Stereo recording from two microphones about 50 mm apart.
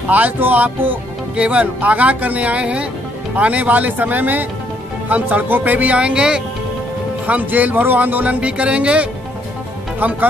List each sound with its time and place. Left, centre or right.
0.1 s speech: right
5.5 s speech: right; by 6.4 s centre
7.2 s speech: right